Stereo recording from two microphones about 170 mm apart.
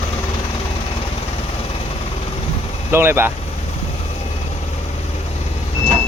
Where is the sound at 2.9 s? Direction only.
15° right (ahead or behind).